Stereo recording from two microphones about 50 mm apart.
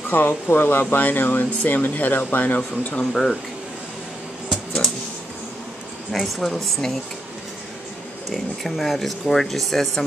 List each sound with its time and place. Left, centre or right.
0.1 s speech: left
0.8 s speech: left
3.1 s speech: centre
6.1 s speech: centre
8.6 s speech: centre